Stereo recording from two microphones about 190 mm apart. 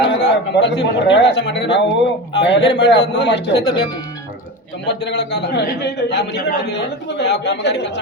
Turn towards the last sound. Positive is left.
turn(degrees=65)  # may be behind; listen again after turning